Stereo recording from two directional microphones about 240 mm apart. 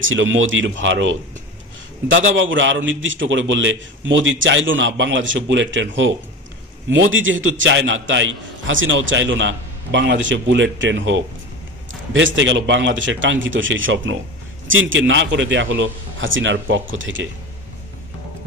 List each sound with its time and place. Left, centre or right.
0.0 s a man's voice: right